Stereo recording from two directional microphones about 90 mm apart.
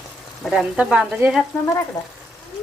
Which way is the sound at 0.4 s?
Centre (ahead or behind).